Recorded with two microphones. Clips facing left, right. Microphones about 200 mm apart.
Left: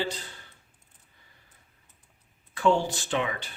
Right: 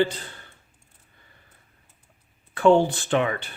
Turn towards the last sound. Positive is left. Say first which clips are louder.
# right 6 dB
turn(degrees=-55)  # may be behind; listen again after turning